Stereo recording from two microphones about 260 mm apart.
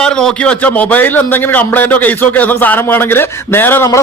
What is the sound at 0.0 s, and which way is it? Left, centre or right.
A man's voice, centre.